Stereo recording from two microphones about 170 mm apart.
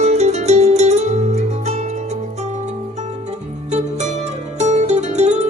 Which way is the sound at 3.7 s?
40° right (ahead or behind).